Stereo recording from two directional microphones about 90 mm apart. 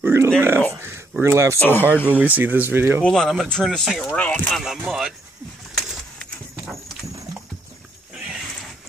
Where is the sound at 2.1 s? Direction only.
20° right (ahead or behind).